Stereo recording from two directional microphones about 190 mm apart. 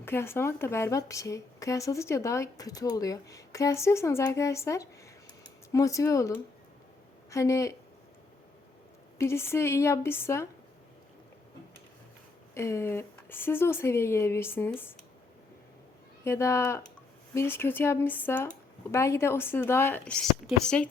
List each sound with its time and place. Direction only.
0.0 s speech: 10° left (ahead or behind)
9.1 s speech: 15° left (ahead or behind)
12.5 s speech: 15° left (ahead or behind)
16.2 s speech: 15° left (ahead or behind)